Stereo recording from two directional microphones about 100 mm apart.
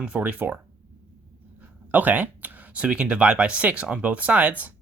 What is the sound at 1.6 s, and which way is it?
Speech, 15° right (ahead or behind).